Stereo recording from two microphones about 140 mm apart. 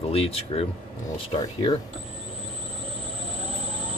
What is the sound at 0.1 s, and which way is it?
Speech, 45° left (ahead or behind).